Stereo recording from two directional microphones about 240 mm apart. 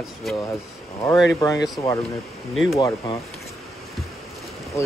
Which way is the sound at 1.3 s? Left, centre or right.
Centre.